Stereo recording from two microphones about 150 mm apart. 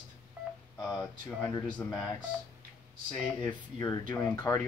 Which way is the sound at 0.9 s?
20° left (ahead or behind).